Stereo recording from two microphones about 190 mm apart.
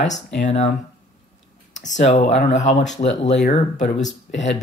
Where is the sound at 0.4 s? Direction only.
35° left (ahead or behind).